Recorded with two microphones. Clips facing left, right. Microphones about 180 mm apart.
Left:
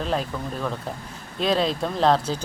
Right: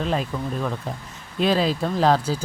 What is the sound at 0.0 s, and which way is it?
Speech, centre (ahead or behind).